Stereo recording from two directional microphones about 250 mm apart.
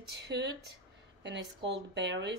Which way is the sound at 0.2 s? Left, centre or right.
Right.